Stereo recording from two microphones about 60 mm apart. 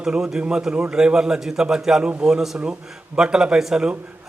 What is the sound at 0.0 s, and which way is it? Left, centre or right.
A man's voice, centre.